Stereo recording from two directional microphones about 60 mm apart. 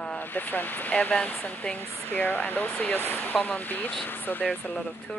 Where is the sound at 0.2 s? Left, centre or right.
Left.